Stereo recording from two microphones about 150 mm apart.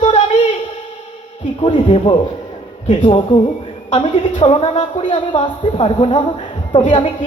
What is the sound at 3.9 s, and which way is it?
A woman's voice, 35° left (ahead or behind).